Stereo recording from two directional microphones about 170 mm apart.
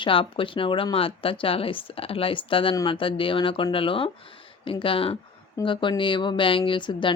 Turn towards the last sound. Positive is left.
turn(degrees=30)  # may be behind; listen again after turning